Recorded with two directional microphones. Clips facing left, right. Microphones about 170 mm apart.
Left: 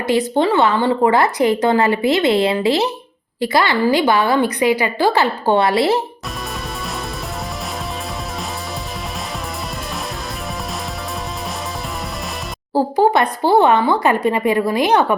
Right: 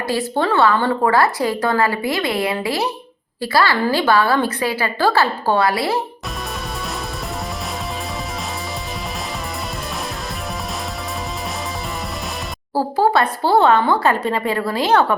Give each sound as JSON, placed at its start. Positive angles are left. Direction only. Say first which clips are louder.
{"t": 0.1, "sound": "a woman's voice", "louder": "left 4 dB", "side_deg": 20}
{"t": 12.7, "sound": "a woman's voice", "louder": "left 2 dB", "side_deg": 20}